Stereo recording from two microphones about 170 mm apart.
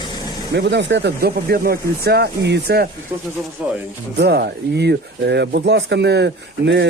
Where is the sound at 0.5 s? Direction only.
90° right.